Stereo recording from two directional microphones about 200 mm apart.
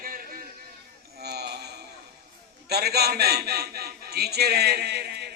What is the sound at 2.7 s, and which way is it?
A man's voice, 50° right (ahead or behind).